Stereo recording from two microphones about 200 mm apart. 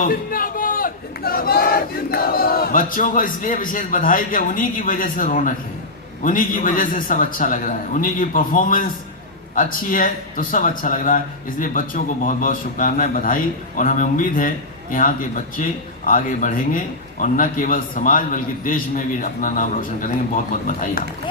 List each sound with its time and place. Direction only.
0.0 s a man's voice: 45° left (ahead or behind)